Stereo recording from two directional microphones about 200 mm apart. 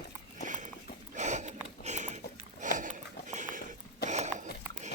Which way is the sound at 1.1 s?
35° right (ahead or behind).